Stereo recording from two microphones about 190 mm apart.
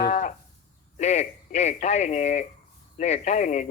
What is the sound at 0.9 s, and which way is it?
Speech, 35° left (ahead or behind).